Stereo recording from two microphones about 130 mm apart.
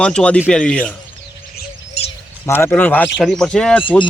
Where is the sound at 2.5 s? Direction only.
15° left (ahead or behind).